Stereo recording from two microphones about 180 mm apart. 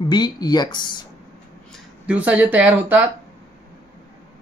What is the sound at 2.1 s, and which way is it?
Speech, 10° right (ahead or behind).